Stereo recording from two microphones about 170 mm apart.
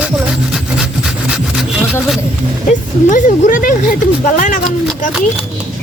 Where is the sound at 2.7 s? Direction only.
50° left (ahead or behind).